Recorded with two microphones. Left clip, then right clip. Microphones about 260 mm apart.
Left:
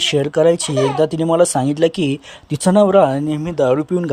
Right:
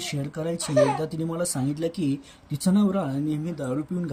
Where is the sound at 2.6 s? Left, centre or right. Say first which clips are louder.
Left 15 dB; left.